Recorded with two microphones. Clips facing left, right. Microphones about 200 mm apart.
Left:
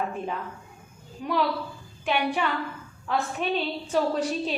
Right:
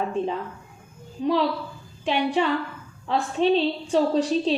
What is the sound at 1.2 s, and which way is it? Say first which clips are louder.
A woman's voice: right 4 dB; 30° right (ahead or behind).